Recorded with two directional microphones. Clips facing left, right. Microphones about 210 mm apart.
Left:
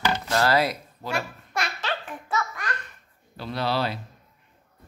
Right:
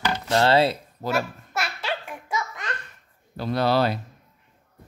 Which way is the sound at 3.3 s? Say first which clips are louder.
Right 5 dB; 45° right (ahead or behind).